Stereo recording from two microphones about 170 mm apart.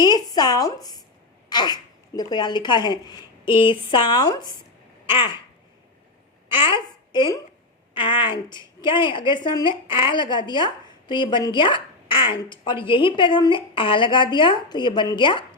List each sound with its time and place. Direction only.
0.0 s a woman's voice: 25° left (ahead or behind)
6.5 s a child's voice: 30° left (ahead or behind)